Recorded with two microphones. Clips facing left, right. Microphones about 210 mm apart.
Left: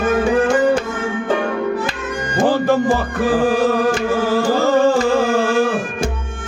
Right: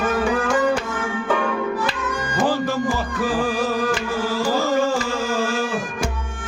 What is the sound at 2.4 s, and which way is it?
Music, 60° left (ahead or behind).